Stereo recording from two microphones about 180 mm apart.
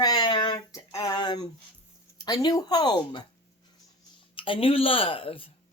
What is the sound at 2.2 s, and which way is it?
A woman's voice, 20° left (ahead or behind).